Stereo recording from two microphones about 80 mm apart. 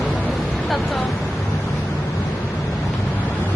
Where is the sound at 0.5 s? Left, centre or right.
Centre.